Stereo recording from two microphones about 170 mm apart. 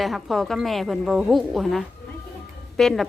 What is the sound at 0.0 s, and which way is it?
A woman's voice, centre (ahead or behind).